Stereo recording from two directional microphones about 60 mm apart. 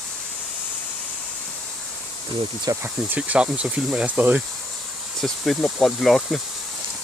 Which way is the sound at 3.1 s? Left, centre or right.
Right.